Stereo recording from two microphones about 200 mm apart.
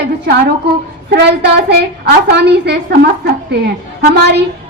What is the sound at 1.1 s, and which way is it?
A woman's voice, 55° right (ahead or behind).